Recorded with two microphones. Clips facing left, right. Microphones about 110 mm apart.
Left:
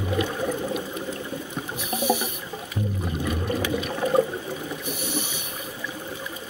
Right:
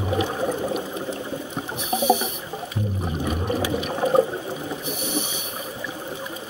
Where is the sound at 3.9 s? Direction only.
25° right (ahead or behind).